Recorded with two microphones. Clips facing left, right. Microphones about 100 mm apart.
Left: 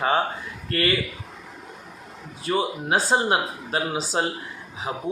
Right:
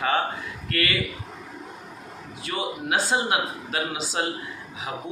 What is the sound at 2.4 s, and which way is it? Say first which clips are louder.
A man's voice: left 5 dB; 35° left (ahead or behind).